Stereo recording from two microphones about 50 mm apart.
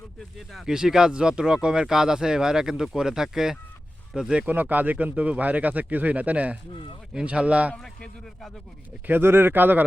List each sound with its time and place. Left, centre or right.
0.3 s speech: centre
0.7 s speech: centre
4.4 s speech: right
7.8 s a man's voice: centre
9.0 s speech: right